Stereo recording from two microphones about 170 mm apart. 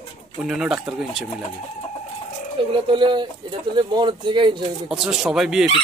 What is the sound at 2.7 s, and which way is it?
Speech, 30° right (ahead or behind).